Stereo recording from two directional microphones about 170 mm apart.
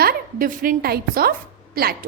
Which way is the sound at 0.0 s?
60° right (ahead or behind).